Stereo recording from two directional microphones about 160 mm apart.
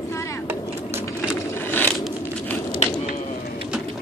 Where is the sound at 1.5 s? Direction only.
15° left (ahead or behind).